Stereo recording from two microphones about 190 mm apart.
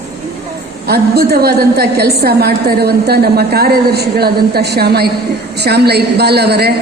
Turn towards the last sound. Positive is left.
turn(degrees=-60)  # may be behind; listen again after turning